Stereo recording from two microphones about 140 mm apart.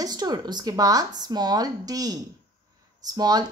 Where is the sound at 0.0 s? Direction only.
30° right (ahead or behind).